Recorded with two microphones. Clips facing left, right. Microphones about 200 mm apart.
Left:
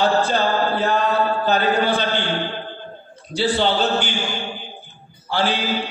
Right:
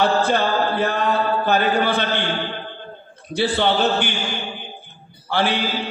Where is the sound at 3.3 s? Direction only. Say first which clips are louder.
Even; 55° right (ahead or behind).